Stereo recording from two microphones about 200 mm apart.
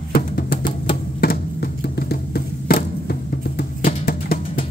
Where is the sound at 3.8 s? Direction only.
45° left (ahead or behind).